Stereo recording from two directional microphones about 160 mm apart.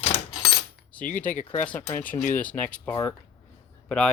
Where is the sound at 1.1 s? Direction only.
10° left (ahead or behind).